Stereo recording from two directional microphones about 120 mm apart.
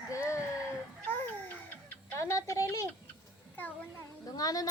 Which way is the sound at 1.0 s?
15° left (ahead or behind).